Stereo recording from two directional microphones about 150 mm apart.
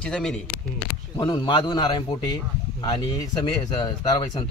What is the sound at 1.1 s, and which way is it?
Speech, 30° left (ahead or behind).